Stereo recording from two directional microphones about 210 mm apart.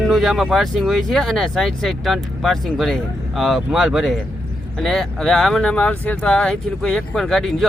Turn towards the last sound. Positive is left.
turn(degrees=0)  # may be behind; listen again after turning